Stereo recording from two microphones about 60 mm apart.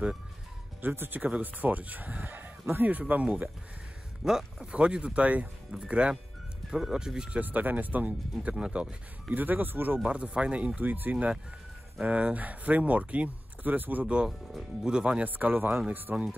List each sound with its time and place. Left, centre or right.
0.8 s speech: right
4.2 s speech: centre
4.7 s speech: centre
7.3 s speech: right
8.5 s speech: centre
9.3 s speech: right
10.0 s speech: centre
12.0 s speech: right
14.0 s speech: centre
15.2 s speech: right